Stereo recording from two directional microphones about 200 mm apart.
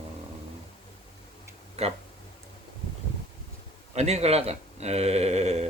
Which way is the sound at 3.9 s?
35° right (ahead or behind).